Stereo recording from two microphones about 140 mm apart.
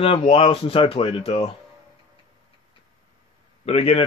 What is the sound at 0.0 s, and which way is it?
Speech, 40° left (ahead or behind).